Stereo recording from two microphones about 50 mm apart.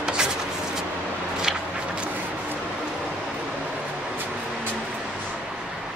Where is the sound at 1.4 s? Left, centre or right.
Centre.